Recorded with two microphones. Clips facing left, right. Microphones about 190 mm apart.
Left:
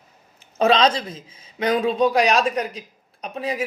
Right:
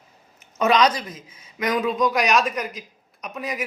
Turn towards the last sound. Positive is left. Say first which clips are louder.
# left 3 dB
turn(degrees=30)  # may be behind; listen again after turning